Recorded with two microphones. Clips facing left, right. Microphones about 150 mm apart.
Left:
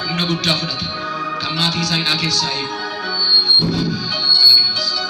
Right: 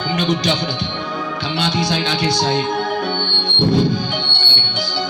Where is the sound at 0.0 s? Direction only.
45° right (ahead or behind).